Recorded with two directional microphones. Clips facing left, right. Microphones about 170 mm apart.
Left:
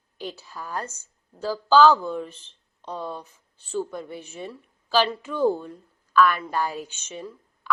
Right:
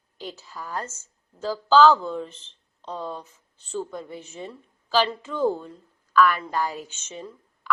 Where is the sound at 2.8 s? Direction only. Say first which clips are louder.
Even; 15° left (ahead or behind).